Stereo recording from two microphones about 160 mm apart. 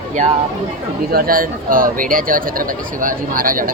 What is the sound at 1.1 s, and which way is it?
Speech, 65° right (ahead or behind).